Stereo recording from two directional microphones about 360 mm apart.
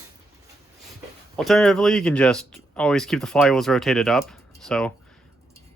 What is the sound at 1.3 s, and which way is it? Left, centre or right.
Speech, centre.